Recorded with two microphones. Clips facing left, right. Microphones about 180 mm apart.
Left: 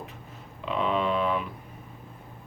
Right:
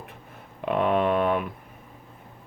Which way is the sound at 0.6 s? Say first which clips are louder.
Right 4 dB; 55° right (ahead or behind).